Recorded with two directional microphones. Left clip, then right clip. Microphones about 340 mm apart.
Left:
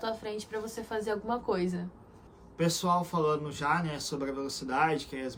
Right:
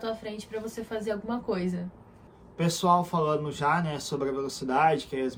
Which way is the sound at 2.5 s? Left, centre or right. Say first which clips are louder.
Right 4 dB; centre.